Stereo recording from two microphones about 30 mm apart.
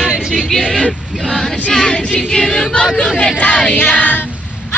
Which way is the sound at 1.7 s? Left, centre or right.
Left.